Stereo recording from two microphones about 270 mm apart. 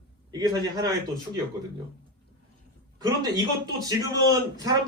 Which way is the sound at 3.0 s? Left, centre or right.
Centre.